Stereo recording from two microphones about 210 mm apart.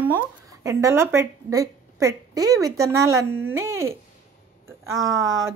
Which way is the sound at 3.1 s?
90° right.